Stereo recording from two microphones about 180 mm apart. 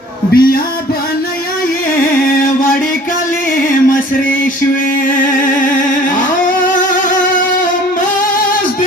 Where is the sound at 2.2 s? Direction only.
50° left (ahead or behind).